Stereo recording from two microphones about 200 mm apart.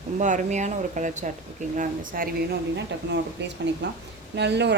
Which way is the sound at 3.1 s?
60° right (ahead or behind).